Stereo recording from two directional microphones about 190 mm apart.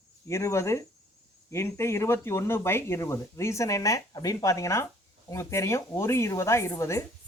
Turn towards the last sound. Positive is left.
turn(degrees=15)  # may be behind; listen again after turning